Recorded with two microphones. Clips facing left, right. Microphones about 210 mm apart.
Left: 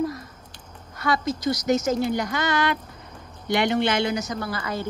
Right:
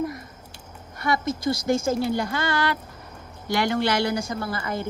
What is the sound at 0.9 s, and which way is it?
Speech, 25° right (ahead or behind).